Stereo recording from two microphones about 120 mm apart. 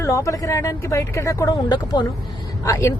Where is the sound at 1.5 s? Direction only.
40° left (ahead or behind).